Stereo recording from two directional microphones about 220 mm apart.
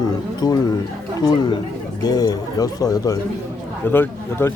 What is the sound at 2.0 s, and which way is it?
Speech, 15° left (ahead or behind).